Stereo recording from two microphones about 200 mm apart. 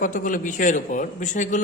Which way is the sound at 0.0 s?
40° left (ahead or behind).